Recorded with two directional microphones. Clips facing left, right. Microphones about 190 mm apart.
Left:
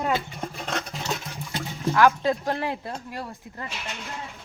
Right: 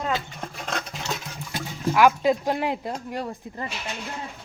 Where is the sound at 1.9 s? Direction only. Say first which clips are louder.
Right 1 dB; 15° right (ahead or behind).